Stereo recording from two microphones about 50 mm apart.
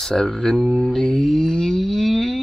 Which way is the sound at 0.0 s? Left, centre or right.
Centre.